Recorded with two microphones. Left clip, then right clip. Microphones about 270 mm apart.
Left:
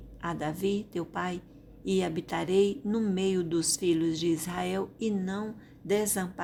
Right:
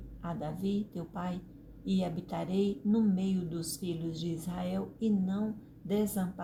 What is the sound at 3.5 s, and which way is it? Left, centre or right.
Speech, left.